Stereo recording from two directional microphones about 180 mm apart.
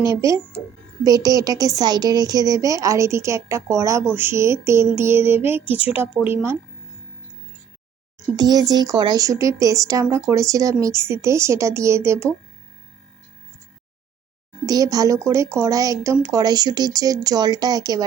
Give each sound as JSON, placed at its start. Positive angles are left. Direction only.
{"t": 0.1, "sound": "a woman's voice", "side_deg": -15}
{"t": 8.4, "sound": "a woman's voice", "side_deg": -20}
{"t": 14.7, "sound": "a woman's voice", "side_deg": -20}